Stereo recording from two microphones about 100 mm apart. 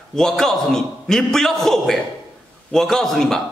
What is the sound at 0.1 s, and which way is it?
A man's voice, 5° left (ahead or behind).